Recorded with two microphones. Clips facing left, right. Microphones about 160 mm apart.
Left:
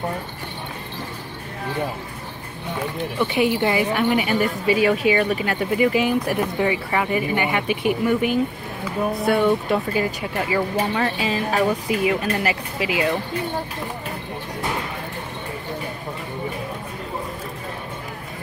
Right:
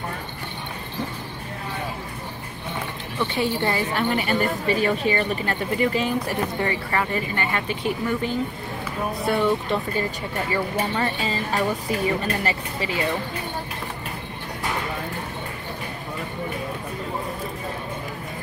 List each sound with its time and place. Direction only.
3.2 s a woman's voice: 15° left (ahead or behind)
9.2 s a woman's voice: 5° left (ahead or behind)